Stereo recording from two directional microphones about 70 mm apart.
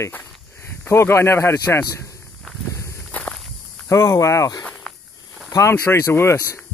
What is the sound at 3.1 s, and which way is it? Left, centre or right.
Walk, left.